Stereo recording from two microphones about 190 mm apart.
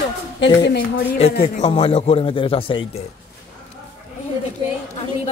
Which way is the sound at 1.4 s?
30° left (ahead or behind).